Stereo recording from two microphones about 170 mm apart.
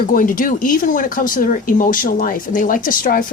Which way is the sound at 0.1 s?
50° left (ahead or behind).